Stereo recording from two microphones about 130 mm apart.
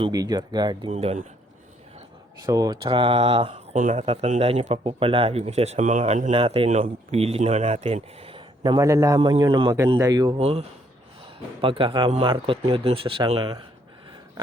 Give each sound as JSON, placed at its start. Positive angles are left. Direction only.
{"t": 0.1, "sound": "speech", "side_deg": -30}
{"t": 0.9, "sound": "speech", "side_deg": -55}
{"t": 2.5, "sound": "a man's voice", "side_deg": -30}
{"t": 2.8, "sound": "speech", "side_deg": -40}
{"t": 4.0, "sound": "speech", "side_deg": -50}
{"t": 6.3, "sound": "speech", "side_deg": -45}
{"t": 6.7, "sound": "speech", "side_deg": -60}
{"t": 8.6, "sound": "a man's voice", "side_deg": -30}
{"t": 10.3, "sound": "speech", "side_deg": -50}
{"t": 11.6, "sound": "speech", "side_deg": -40}